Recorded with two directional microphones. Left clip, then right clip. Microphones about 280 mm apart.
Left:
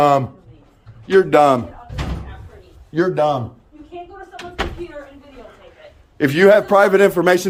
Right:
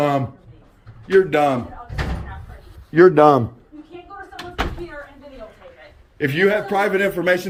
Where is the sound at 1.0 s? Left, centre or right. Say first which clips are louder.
Left 4 dB; centre.